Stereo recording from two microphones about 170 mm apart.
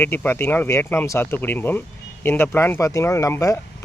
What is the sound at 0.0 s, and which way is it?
Speech, 10° left (ahead or behind).